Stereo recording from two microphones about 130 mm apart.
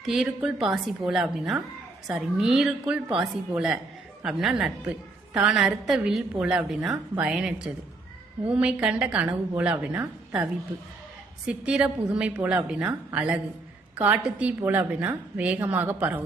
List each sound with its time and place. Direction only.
0.0 s a woman's voice: 5° right (ahead or behind)